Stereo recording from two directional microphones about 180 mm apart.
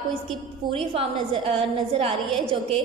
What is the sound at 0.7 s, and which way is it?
A woman's voice, 30° right (ahead or behind).